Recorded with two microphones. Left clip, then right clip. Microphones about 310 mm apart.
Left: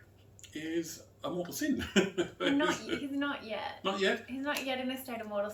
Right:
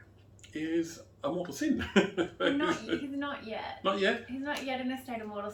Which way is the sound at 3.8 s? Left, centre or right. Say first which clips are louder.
Right 5 dB; centre.